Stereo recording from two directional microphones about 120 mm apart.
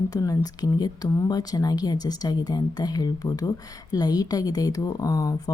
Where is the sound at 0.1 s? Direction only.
30° left (ahead or behind).